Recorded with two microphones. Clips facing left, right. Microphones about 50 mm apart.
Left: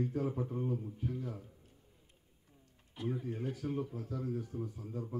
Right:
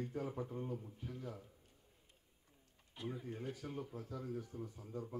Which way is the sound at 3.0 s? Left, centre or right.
Centre.